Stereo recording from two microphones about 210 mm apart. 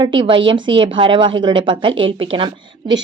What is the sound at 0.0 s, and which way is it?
Speech, 25° right (ahead or behind).